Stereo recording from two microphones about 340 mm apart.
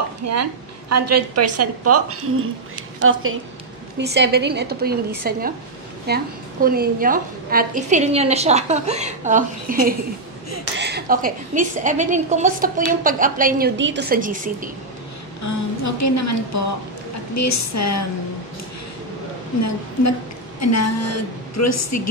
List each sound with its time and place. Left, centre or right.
0.2 s a woman's voice: right
10.8 s a woman's voice: right
15.4 s a woman's voice: left
19.6 s a woman's voice: left